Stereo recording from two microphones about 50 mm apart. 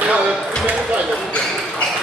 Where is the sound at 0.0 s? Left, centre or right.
Right.